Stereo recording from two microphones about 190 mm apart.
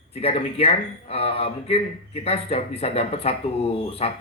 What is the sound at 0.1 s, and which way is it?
A man's voice, 35° left (ahead or behind).